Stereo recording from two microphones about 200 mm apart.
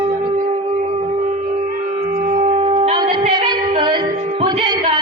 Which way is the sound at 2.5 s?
30° right (ahead or behind).